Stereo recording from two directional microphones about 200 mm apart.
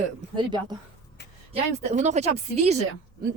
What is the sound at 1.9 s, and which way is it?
Speech, 35° right (ahead or behind).